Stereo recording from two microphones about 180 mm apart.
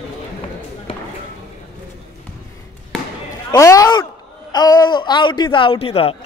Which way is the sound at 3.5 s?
20° left (ahead or behind).